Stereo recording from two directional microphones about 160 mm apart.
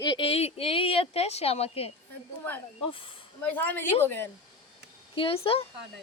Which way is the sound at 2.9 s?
35° left (ahead or behind).